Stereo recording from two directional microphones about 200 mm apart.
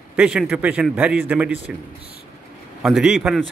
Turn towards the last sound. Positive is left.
turn(degrees=-5)  # may be behind; listen again after turning